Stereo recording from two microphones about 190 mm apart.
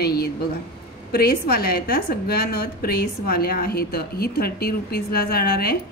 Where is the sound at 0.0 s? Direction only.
55° left (ahead or behind).